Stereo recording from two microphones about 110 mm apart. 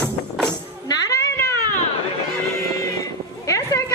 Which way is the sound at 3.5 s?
30° left (ahead or behind).